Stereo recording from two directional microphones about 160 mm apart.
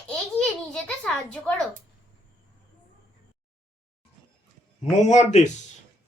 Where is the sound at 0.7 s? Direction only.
5° left (ahead or behind).